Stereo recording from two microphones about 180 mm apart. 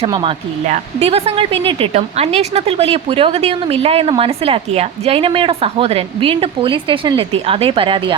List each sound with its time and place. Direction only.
0.0 s a woman's voice: 30° right (ahead or behind)